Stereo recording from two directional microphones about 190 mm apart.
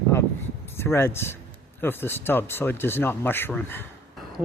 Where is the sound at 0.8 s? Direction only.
10° left (ahead or behind).